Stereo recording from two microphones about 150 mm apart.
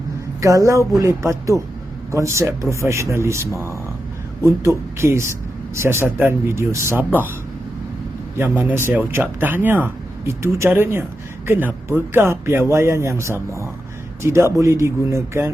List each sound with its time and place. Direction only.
0.4 s speech: 20° right (ahead or behind)
8.4 s speech: 15° right (ahead or behind)